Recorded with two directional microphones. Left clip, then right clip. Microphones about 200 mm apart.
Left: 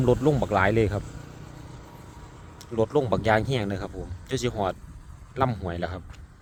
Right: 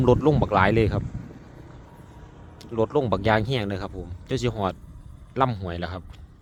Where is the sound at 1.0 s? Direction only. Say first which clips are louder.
Right 2 dB; 70° left (ahead or behind).